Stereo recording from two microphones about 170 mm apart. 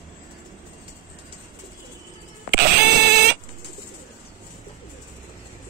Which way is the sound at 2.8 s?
70° right (ahead or behind).